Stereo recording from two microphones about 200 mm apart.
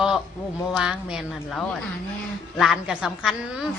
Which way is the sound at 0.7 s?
5° right (ahead or behind).